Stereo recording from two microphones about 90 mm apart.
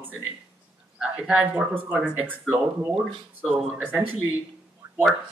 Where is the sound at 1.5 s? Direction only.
15° right (ahead or behind).